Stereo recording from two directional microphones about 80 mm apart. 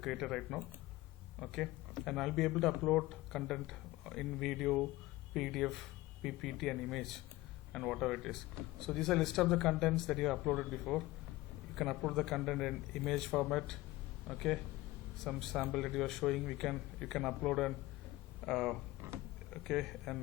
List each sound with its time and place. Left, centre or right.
0.0 s speech: centre
19.0 s a sound: right
19.5 s speech: centre